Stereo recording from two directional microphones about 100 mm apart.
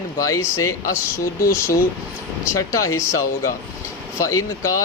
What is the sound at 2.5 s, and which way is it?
Speech, 30° left (ahead or behind).